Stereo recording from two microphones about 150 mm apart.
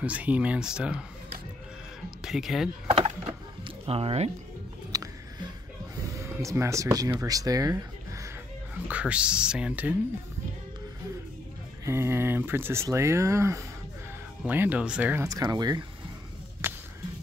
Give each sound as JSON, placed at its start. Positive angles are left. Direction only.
{"t": 0.0, "sound": "speech", "side_deg": -10}
{"t": 2.0, "sound": "speech", "side_deg": -5}
{"t": 2.9, "sound": "a sound", "side_deg": -45}
{"t": 4.9, "sound": "a sound", "side_deg": -25}
{"t": 6.1, "sound": "speech", "side_deg": -20}
{"t": 8.7, "sound": "speech", "side_deg": -10}
{"t": 11.8, "sound": "speech", "side_deg": -15}
{"t": 15.2, "sound": "speech", "side_deg": -25}
{"t": 16.6, "sound": "a sound", "side_deg": -15}